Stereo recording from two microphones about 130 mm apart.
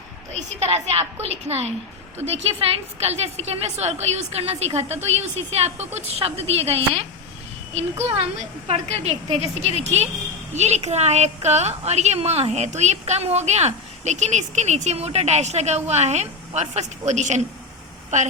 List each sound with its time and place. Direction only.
0.6 s a woman's voice: 55° right (ahead or behind)